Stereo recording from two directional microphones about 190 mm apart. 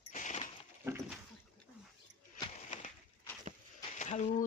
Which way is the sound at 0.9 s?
15° right (ahead or behind).